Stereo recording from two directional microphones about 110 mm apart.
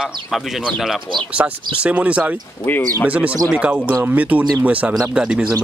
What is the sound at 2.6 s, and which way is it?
Speech, 20° left (ahead or behind).